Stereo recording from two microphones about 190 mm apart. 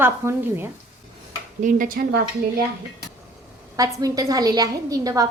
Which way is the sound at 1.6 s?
45° right (ahead or behind).